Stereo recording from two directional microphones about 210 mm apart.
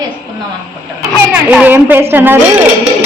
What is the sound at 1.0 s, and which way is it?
A child's voice, 5° right (ahead or behind).